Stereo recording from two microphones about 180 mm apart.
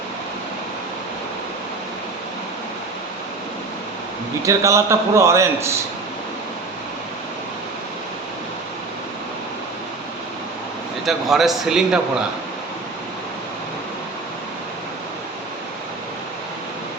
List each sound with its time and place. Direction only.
4.4 s a man's voice: 15° right (ahead or behind)
11.0 s a man's voice: centre (ahead or behind)